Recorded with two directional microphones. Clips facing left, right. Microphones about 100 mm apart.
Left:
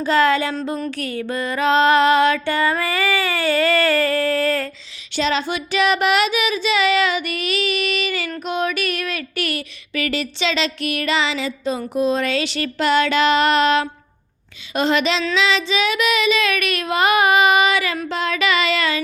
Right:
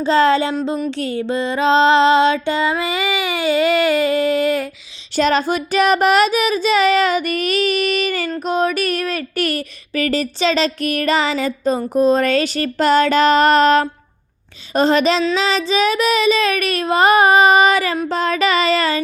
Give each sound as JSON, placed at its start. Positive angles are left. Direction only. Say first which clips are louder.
{"t": 0.0, "sound": "music", "louder": "right 3 dB", "side_deg": -30}
{"t": 5.1, "sound": "child singing", "louder": "right 5 dB", "side_deg": -45}
{"t": 8.4, "sound": "speech", "louder": "right 4 dB", "side_deg": -40}